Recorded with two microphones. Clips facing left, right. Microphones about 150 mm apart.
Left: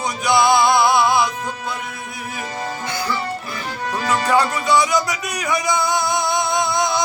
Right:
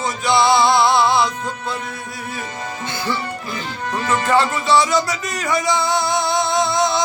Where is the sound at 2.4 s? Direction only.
5° left (ahead or behind).